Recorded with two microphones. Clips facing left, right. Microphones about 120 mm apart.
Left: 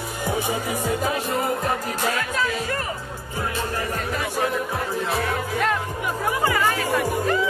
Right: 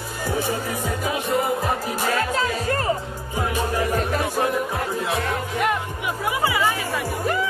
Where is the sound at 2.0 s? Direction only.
40° right (ahead or behind).